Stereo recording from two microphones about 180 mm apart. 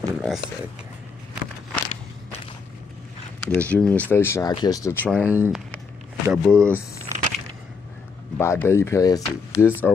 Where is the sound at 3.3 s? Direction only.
5° left (ahead or behind).